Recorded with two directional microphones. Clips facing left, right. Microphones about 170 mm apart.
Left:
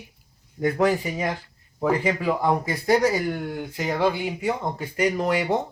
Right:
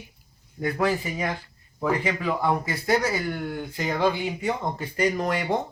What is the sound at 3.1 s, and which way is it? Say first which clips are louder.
Speech: left 2 dB; 15° left (ahead or behind).